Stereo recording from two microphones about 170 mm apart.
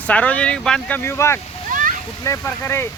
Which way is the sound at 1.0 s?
15° left (ahead or behind).